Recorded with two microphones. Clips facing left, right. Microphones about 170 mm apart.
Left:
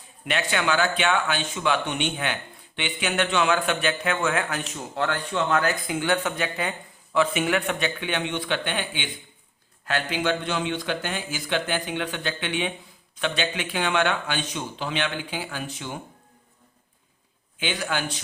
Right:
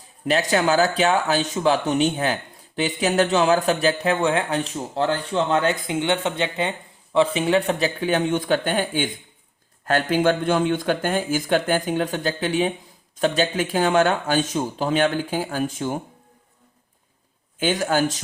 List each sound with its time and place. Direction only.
0.3 s speech: 35° right (ahead or behind)
17.6 s speech: 45° right (ahead or behind)